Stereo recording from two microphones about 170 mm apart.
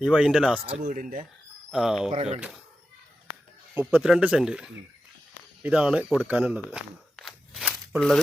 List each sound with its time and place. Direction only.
0.0 s speech: 5° right (ahead or behind)
0.6 s speech: 35° right (ahead or behind); by 1.2 s 50° right (ahead or behind)
1.7 s speech: centre (ahead or behind)
3.8 s speech: 5° right (ahead or behind)